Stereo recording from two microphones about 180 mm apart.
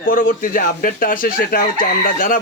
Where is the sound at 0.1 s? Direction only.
50° left (ahead or behind).